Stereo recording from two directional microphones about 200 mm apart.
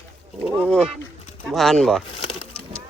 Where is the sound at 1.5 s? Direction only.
Centre (ahead or behind).